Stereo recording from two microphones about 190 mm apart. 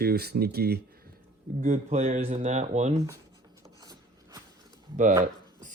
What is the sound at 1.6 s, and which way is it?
Speech, 40° right (ahead or behind).